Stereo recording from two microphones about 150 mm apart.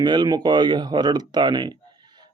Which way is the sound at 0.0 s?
30° right (ahead or behind).